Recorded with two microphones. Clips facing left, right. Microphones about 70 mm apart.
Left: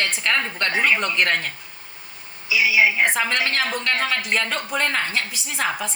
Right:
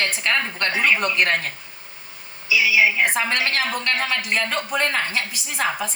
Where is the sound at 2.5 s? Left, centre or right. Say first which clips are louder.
Even; centre.